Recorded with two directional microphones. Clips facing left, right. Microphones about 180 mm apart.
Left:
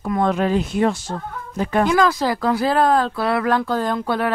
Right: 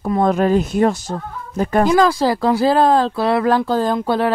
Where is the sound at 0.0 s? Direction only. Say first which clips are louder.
Right 3 dB; 40° right (ahead or behind).